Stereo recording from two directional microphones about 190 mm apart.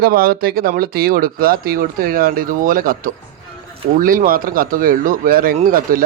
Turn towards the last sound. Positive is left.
turn(degrees=-45)  # may be behind; listen again after turning